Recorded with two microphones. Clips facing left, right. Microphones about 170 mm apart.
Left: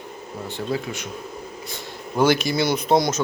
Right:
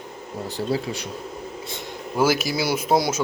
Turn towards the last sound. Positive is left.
turn(degrees=-5)  # may be behind; listen again after turning